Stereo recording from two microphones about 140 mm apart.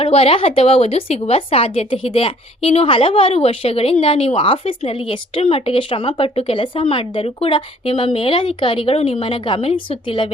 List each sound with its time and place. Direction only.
0.0 s speech: 40° left (ahead or behind)